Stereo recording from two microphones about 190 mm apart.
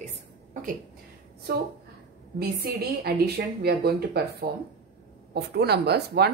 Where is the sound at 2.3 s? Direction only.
55° right (ahead or behind).